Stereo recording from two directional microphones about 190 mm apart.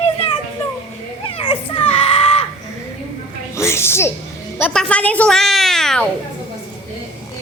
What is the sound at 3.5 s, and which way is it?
Music, 15° left (ahead or behind).